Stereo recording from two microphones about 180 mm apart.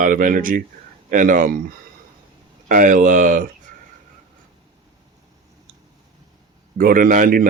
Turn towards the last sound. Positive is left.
turn(degrees=-50)  # may be behind; listen again after turning